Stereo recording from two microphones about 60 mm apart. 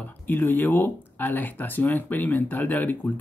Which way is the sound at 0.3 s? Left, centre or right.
Left.